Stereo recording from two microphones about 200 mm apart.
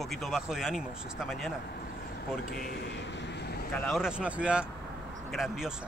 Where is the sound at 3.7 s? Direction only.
5° left (ahead or behind).